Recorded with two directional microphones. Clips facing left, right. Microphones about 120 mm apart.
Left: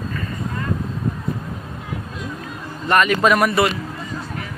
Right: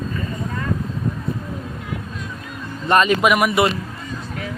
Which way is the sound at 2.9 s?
25° right (ahead or behind).